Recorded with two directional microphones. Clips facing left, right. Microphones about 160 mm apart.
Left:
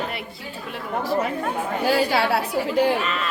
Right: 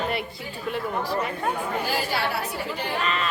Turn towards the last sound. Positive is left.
turn(degrees=0)  # may be behind; listen again after turning